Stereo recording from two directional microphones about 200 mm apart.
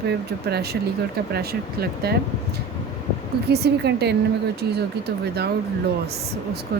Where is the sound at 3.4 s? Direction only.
55° right (ahead or behind).